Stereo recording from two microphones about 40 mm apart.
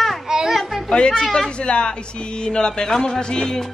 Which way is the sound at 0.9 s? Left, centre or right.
Left.